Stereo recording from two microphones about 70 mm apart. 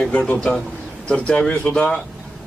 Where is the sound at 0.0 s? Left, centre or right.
Centre.